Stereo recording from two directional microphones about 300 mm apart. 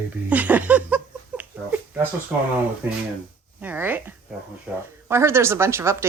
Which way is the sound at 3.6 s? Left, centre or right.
Centre.